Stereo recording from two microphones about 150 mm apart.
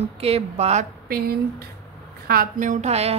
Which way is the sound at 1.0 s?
90° right.